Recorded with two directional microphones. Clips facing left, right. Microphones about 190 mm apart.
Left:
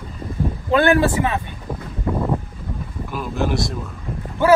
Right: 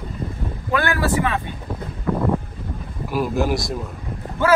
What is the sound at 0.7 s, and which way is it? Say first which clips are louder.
Speech: left 5 dB; 25° left (ahead or behind).